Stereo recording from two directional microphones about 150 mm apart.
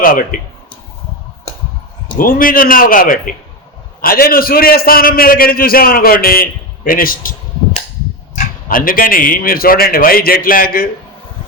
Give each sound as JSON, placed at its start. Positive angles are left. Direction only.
{"t": 0.0, "sound": "speech", "side_deg": 70}
{"t": 2.1, "sound": "speech", "side_deg": 70}
{"t": 8.4, "sound": "speech", "side_deg": 70}